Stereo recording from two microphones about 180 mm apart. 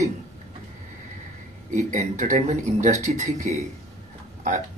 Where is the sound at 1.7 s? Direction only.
45° right (ahead or behind).